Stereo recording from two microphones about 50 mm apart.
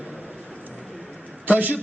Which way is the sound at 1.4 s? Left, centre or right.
Right.